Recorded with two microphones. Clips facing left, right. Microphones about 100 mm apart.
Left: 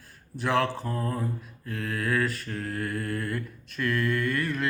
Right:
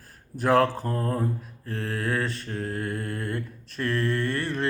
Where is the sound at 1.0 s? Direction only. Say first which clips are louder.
Right 3 dB; 40° right (ahead or behind).